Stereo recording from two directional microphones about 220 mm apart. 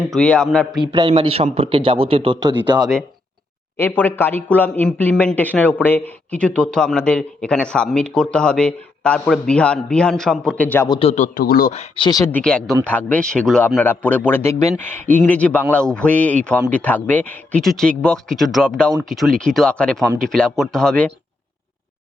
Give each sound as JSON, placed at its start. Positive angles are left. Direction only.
{"t": 0.1, "sound": "speech", "side_deg": 5}
{"t": 0.8, "sound": "speech", "side_deg": -20}
{"t": 3.8, "sound": "speech", "side_deg": 10}
{"t": 11.1, "sound": "speech", "side_deg": 35}